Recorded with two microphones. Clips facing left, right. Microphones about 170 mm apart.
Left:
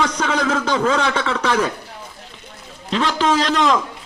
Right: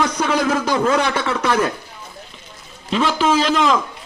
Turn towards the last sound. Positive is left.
turn(degrees=0)  # may be behind; listen again after turning